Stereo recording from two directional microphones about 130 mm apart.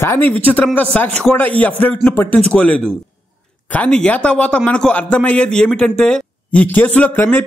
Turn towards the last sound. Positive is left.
turn(degrees=15)  # may be behind; listen again after turning